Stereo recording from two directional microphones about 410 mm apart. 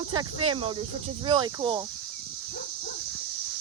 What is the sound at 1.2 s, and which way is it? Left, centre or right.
Speech, centre.